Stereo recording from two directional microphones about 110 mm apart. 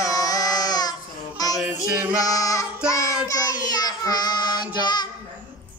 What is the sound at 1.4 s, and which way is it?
Child singing, 35° left (ahead or behind).